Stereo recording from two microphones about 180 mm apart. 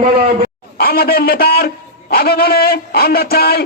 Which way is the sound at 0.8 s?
60° left (ahead or behind).